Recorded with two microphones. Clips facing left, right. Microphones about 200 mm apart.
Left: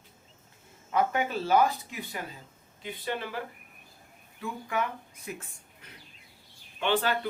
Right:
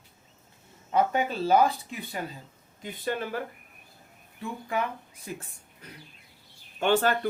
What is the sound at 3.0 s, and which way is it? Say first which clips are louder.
Speech: right 4 dB; 45° right (ahead or behind).